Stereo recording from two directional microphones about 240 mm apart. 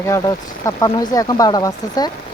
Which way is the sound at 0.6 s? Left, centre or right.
Centre.